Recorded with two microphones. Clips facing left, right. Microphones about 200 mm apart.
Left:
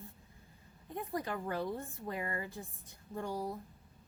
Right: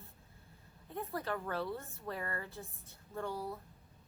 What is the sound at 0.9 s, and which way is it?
A woman's voice, 15° left (ahead or behind).